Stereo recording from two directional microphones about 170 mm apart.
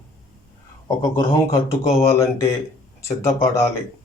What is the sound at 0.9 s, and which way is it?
A man's voice, 20° left (ahead or behind).